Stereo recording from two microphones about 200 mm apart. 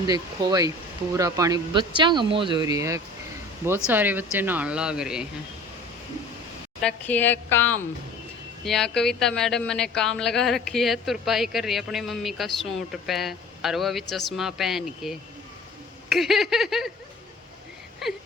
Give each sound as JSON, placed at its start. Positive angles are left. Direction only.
{"t": 0.1, "sound": "speech", "side_deg": -20}
{"t": 6.8, "sound": "speech", "side_deg": 10}
{"t": 18.0, "sound": "a sound", "side_deg": 0}